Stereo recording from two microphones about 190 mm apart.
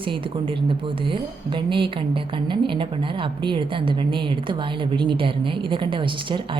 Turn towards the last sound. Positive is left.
turn(degrees=-25)  # may be behind; listen again after turning